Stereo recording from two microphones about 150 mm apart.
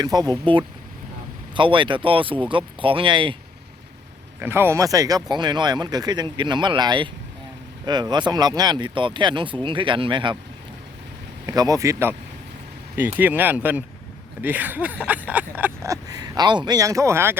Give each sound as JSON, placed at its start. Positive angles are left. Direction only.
{"t": 0.0, "sound": "speech", "side_deg": -25}
{"t": 4.4, "sound": "speech", "side_deg": -15}
{"t": 11.4, "sound": "speech", "side_deg": -25}